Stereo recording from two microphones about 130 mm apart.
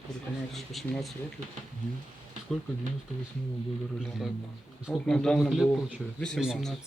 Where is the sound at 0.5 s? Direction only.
Centre (ahead or behind).